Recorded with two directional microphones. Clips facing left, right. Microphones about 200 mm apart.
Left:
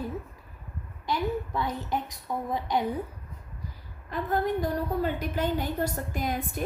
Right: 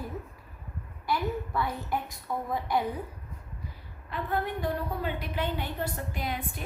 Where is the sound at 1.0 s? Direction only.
20° left (ahead or behind).